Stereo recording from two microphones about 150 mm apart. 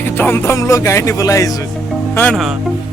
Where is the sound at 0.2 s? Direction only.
15° left (ahead or behind).